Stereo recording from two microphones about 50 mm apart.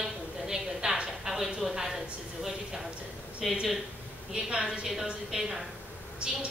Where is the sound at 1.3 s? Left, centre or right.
Centre.